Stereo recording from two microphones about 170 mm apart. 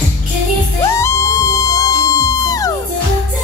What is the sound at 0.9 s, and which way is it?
Music, 15° left (ahead or behind).